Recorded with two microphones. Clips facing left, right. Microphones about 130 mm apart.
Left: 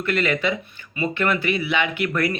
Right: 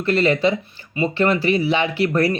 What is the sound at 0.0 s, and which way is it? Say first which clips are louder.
Speech: right 5 dB; 35° right (ahead or behind).